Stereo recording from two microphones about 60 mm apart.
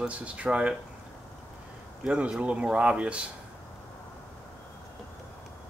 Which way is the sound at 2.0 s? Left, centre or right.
Centre.